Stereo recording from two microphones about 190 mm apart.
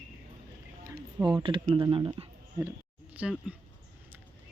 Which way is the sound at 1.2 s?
25° right (ahead or behind).